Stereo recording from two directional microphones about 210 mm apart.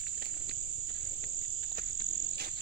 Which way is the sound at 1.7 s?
45° right (ahead or behind).